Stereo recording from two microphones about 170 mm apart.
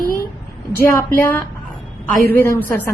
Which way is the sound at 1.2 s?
10° left (ahead or behind).